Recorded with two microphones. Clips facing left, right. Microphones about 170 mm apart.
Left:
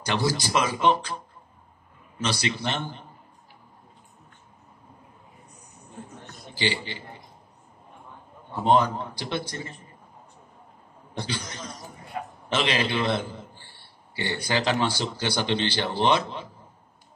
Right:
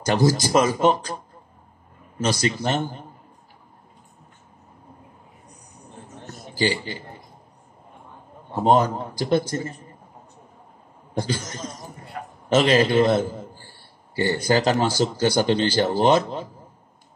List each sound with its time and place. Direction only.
0.0 s a man's voice: 45° right (ahead or behind)
6.5 s a man's voice: 45° right (ahead or behind)
8.5 s a man's voice: 40° right (ahead or behind)
11.1 s a man's voice: 45° right (ahead or behind)